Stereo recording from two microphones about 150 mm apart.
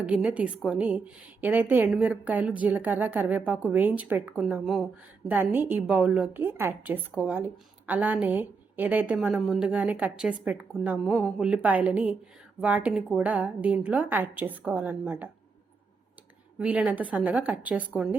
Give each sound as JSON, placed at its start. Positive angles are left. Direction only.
{"t": 0.0, "sound": "a woman's voice", "side_deg": -10}
{"t": 5.3, "sound": "a woman's voice", "side_deg": -15}
{"t": 16.6, "sound": "a woman's voice", "side_deg": -10}